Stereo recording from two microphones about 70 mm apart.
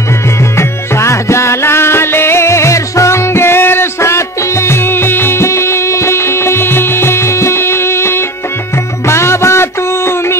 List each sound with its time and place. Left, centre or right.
0.6 s music: left